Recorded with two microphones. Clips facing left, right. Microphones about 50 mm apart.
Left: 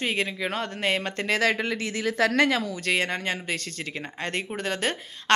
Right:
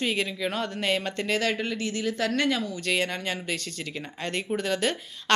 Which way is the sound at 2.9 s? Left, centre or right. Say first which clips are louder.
Left 2 dB; left.